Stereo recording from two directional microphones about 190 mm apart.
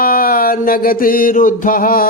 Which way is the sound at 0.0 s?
50° left (ahead or behind).